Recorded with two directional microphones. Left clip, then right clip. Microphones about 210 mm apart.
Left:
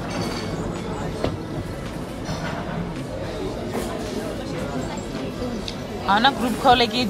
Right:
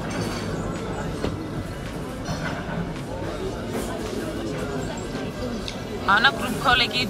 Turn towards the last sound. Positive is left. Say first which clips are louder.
# left 3 dB
turn(degrees=20)  # may be behind; listen again after turning